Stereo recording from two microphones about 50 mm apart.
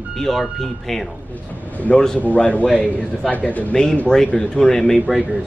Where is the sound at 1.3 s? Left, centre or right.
Left.